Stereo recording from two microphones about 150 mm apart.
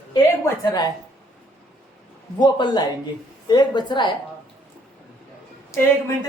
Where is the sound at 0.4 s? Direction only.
25° left (ahead or behind).